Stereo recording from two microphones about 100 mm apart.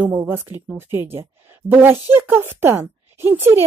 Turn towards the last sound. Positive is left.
turn(degrees=-25)  # may be behind; listen again after turning